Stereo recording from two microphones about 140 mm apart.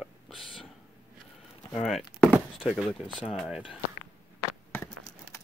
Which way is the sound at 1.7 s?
Centre (ahead or behind).